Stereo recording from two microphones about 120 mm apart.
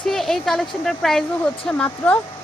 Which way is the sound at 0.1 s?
5° left (ahead or behind).